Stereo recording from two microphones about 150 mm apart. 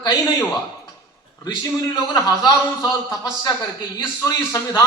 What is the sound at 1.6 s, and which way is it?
A man's voice, 25° left (ahead or behind).